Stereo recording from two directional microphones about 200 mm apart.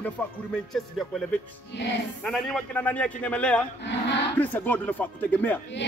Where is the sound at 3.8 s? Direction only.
60° left (ahead or behind).